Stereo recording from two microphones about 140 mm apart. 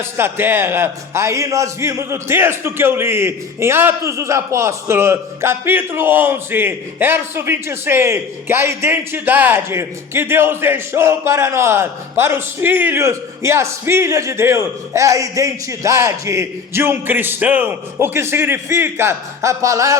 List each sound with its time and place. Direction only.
0.0 s a man's voice: 15° right (ahead or behind)